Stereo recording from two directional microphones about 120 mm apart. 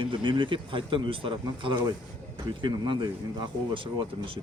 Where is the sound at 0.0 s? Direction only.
45° right (ahead or behind).